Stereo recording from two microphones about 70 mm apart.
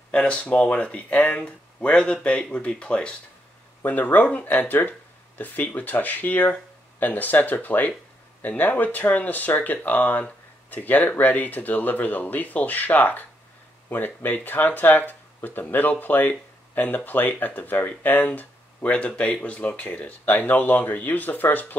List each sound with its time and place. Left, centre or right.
0.1 s speech: centre
3.8 s speech: left